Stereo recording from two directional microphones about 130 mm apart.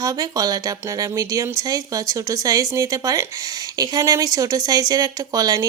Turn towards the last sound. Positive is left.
turn(degrees=-30)  # may be behind; listen again after turning